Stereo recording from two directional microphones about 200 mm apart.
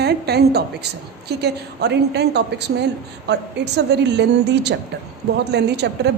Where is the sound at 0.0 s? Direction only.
55° right (ahead or behind).